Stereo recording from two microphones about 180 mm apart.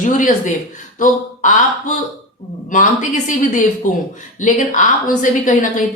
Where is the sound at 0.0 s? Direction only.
45° left (ahead or behind).